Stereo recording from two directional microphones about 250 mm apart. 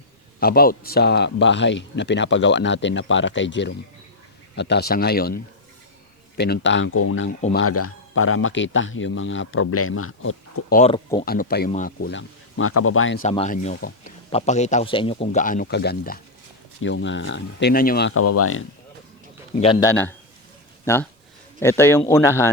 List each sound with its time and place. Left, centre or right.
0.3 s speech: left
10.7 s speech: left
10.9 s a man's voice: centre
11.3 s speech: left
12.5 s speech: left
13.2 s a man's voice: left
15.6 s speech: left
18.1 s speech: left
19.5 s speech: left